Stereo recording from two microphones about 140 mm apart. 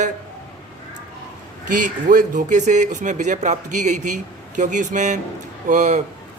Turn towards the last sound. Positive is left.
turn(degrees=-60)  # may be behind; listen again after turning